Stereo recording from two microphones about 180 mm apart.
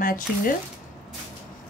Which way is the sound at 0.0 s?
50° left (ahead or behind).